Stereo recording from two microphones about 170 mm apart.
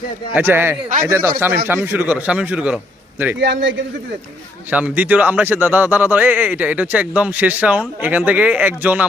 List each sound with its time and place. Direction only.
0.3 s speech: 10° right (ahead or behind)
3.4 s speech: 85° right
4.7 s speech: 10° right (ahead or behind)